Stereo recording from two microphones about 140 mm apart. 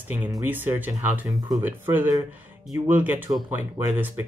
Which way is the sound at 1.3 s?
25° right (ahead or behind).